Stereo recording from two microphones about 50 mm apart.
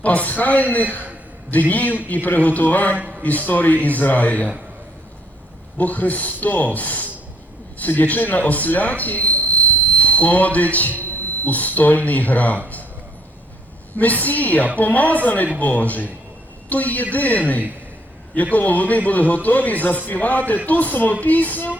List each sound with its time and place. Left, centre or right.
0.0 s a man's voice: left
2.9 s speech: right
3.2 s a man's voice: left
5.7 s a man's voice: left
13.9 s a man's voice: left